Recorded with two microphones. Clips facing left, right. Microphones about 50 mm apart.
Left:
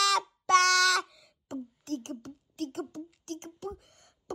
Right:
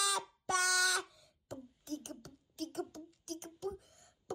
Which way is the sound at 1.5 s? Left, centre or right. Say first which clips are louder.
Left 8 dB; left.